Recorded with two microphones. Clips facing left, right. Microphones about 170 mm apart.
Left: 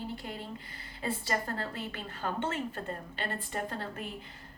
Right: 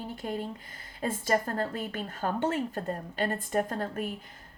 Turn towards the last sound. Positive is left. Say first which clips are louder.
# right 7 dB
turn(degrees=-45)  # may be behind; listen again after turning